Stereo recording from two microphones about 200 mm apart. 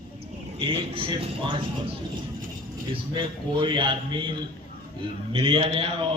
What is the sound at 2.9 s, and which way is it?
A man's voice, 25° right (ahead or behind).